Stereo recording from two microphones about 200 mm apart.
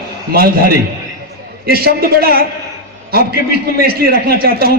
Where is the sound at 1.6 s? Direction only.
50° right (ahead or behind).